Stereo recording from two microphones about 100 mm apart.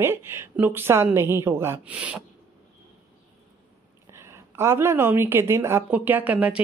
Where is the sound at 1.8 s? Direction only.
15° right (ahead or behind).